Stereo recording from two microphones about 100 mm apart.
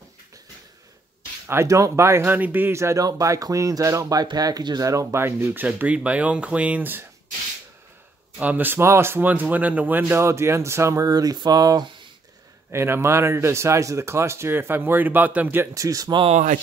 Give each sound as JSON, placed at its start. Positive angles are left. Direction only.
{"t": 1.5, "sound": "speech", "side_deg": -30}
{"t": 5.7, "sound": "speech", "side_deg": -10}
{"t": 8.4, "sound": "speech", "side_deg": -15}
{"t": 12.7, "sound": "speech", "side_deg": -25}
{"t": 15.7, "sound": "speech", "side_deg": -35}